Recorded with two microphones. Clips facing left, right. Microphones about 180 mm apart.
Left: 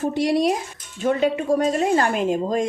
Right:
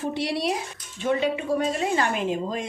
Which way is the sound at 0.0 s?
45° left (ahead or behind).